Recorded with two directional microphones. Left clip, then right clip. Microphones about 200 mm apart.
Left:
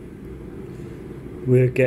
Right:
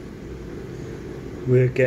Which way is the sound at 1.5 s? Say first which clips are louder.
Left 1 dB; 25° left (ahead or behind).